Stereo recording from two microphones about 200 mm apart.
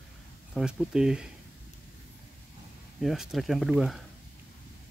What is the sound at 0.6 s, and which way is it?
Speech, 5° right (ahead or behind).